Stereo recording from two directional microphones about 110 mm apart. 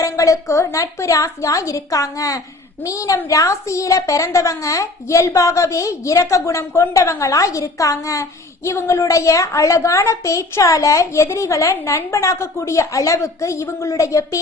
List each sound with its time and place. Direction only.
0.0 s a woman's voice: 30° left (ahead or behind)